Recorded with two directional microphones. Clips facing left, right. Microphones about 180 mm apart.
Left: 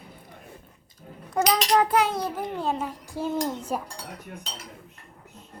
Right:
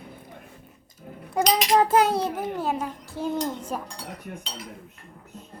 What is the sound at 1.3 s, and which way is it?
Cutlery, 10° right (ahead or behind).